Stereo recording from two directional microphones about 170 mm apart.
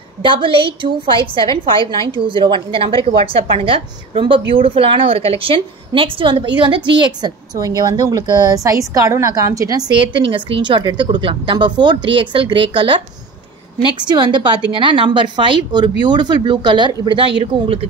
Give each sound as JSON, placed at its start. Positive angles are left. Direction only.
{"t": 0.2, "sound": "a woman's voice", "side_deg": -30}
{"t": 14.1, "sound": "a woman's voice", "side_deg": -30}